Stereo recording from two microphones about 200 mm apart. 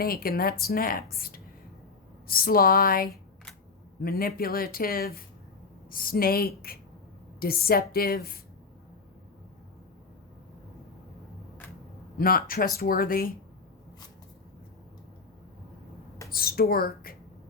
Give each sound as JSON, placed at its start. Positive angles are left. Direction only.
{"t": 0.0, "sound": "a woman's voice", "side_deg": 50}
{"t": 12.1, "sound": "a woman's voice", "side_deg": 45}
{"t": 16.3, "sound": "a woman's voice", "side_deg": 50}